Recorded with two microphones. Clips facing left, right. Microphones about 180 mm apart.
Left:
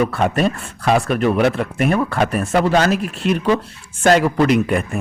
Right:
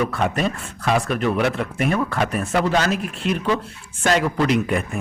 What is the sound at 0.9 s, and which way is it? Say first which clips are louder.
Speech: left 4 dB; 45° left (ahead or behind).